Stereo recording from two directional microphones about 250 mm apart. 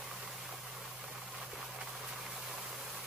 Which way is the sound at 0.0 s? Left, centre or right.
Centre.